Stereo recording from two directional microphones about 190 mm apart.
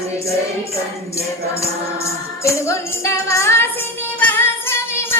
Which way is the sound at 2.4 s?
15° left (ahead or behind).